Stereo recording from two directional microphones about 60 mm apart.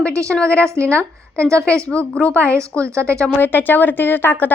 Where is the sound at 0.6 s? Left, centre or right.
Right.